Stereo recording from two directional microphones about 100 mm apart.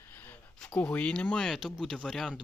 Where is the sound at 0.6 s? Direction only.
10° left (ahead or behind).